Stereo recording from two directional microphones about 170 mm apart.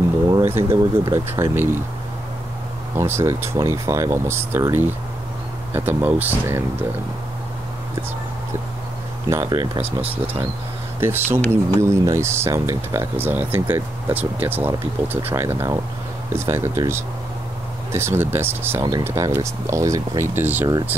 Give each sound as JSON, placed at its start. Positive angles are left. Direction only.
{"t": 0.3, "sound": "speech", "side_deg": -15}
{"t": 3.0, "sound": "speech", "side_deg": -15}
{"t": 9.3, "sound": "speech", "side_deg": -20}
{"t": 11.0, "sound": "speech", "side_deg": -15}